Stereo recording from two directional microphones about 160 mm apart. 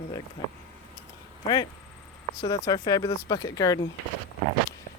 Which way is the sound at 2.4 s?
25° left (ahead or behind).